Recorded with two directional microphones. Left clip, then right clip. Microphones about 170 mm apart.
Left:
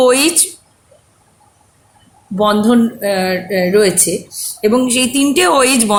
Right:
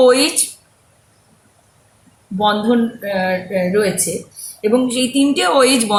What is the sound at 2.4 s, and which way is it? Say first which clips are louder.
Speech: left 3 dB; 60° left (ahead or behind).